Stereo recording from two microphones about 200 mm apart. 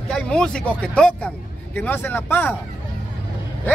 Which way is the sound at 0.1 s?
5° left (ahead or behind).